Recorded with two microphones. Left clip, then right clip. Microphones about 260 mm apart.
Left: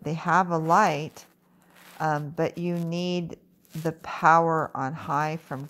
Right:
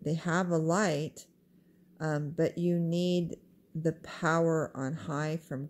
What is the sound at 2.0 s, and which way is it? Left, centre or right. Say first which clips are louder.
Speech: left 5 dB; centre.